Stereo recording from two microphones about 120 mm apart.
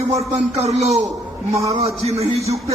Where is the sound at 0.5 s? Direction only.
65° right (ahead or behind).